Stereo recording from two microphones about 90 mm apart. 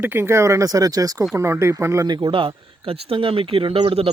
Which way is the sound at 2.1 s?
65° right (ahead or behind).